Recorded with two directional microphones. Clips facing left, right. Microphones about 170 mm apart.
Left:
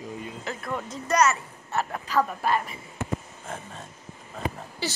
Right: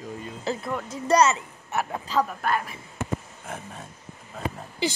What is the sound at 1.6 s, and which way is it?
Speech, 15° right (ahead or behind).